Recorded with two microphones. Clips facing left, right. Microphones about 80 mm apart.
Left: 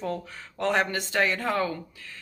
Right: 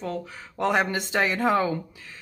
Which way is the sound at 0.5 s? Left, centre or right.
Centre.